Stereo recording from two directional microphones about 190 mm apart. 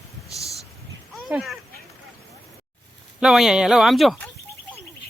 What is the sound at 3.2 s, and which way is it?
Speech, centre (ahead or behind).